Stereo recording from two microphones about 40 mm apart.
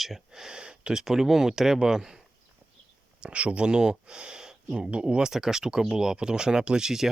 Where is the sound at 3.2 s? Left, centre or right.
Right.